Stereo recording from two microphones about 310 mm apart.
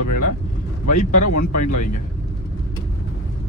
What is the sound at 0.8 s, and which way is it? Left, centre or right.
Speech, left.